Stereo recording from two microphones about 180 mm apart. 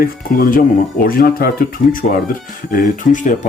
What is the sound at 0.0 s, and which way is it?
Speech, 50° left (ahead or behind).